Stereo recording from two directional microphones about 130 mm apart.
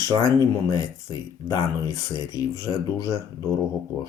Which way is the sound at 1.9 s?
25° left (ahead or behind).